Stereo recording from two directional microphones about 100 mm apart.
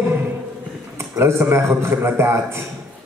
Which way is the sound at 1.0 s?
25° right (ahead or behind).